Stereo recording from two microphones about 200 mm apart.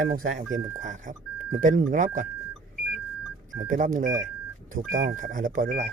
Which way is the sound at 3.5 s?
40° right (ahead or behind).